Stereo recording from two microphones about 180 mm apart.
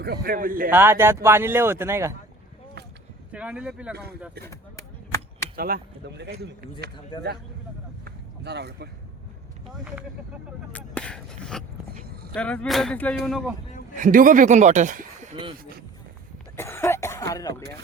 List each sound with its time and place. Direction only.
0.0 s speech: 60° right (ahead or behind)
0.7 s speech: 15° right (ahead or behind)
3.3 s speech: 5° right (ahead or behind)
5.5 s speech: 55° right (ahead or behind)
8.0 s a sound: 65° right (ahead or behind)
9.7 s speech: 5° right (ahead or behind)
10.7 s speech: 5° left (ahead or behind)
14.0 s speech: 45° right (ahead or behind)
16.6 s cough: 15° left (ahead or behind)